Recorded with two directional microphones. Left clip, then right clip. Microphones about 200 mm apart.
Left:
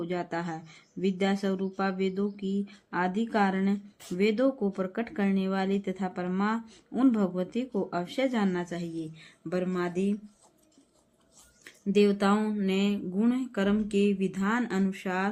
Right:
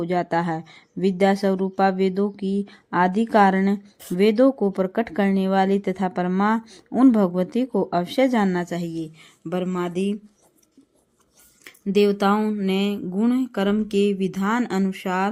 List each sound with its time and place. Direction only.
0.0 s speech: 40° right (ahead or behind)
11.6 s speech: 35° right (ahead or behind)